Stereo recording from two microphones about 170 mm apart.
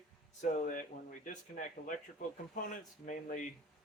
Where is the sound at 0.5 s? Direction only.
50° left (ahead or behind).